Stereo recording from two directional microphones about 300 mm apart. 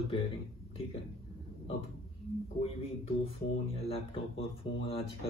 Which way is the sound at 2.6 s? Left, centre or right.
Centre.